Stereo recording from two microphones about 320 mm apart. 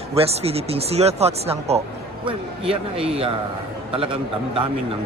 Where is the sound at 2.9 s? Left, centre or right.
Centre.